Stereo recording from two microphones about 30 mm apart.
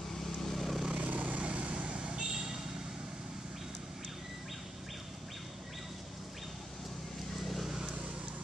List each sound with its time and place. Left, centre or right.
0.2 s vehicle: centre
1.0 s vehicle: right
1.4 s vehicle: right
2.3 s vehicle: centre